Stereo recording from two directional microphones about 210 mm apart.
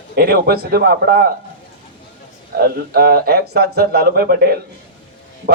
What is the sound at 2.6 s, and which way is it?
Speech, 45° right (ahead or behind).